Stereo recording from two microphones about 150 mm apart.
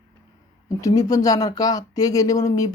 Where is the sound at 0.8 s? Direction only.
25° left (ahead or behind).